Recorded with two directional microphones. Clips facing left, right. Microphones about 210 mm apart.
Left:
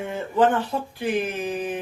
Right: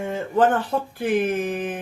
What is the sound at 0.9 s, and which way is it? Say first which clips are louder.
Speech: right 4 dB; 50° right (ahead or behind).